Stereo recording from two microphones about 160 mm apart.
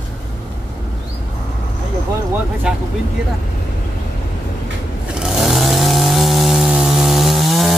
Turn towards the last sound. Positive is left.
turn(degrees=0)  # may be behind; listen again after turning